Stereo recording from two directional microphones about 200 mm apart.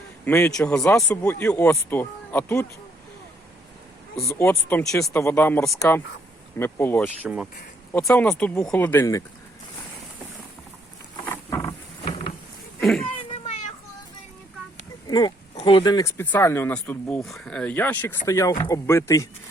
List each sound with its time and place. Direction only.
0.3 s speech: 15° left (ahead or behind)
4.3 s speech: 10° left (ahead or behind)
11.3 s wild animals: 15° left (ahead or behind)
15.0 s a sound: 20° left (ahead or behind)
15.5 s speech: 25° left (ahead or behind)